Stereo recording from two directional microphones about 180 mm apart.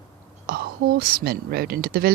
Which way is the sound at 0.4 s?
55° right (ahead or behind).